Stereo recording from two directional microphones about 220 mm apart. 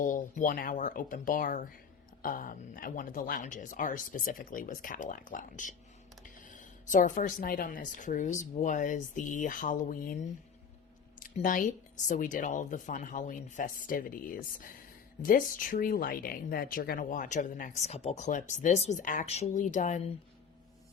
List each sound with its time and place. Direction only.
0.0 s speech: 35° left (ahead or behind)
11.2 s speech: 35° left (ahead or behind)